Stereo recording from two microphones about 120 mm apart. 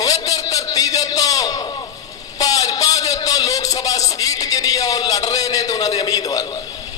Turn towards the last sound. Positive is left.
turn(degrees=35)  # may be behind; listen again after turning